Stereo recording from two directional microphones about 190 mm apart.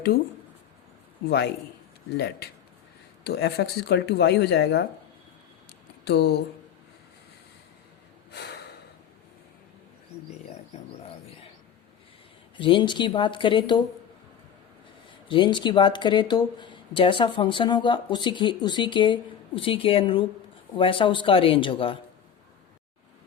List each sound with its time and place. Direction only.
2.1 s speech: 60° left (ahead or behind)
6.1 s speech: 60° left (ahead or behind)
12.5 s speech: 25° left (ahead or behind)
15.3 s speech: 25° left (ahead or behind)